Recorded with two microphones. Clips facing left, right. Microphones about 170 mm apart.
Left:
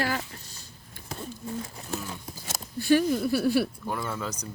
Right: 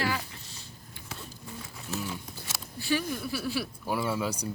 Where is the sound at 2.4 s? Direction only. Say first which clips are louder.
Left 9 dB; 50° left (ahead or behind).